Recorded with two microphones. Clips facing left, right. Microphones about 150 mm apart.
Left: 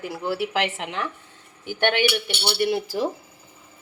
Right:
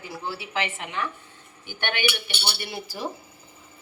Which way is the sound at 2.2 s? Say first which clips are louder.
Left 10 dB; 75° left (ahead or behind).